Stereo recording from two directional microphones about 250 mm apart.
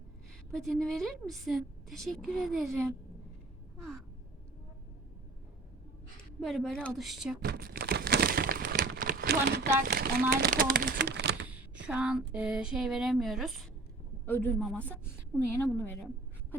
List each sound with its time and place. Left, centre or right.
0.5 s a woman's voice: centre
3.8 s crow: centre
6.4 s a woman's voice: centre
7.4 s a sound: right
11.9 s a woman's voice: centre